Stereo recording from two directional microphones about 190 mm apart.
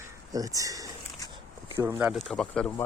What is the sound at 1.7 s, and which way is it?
Speech, 15° right (ahead or behind).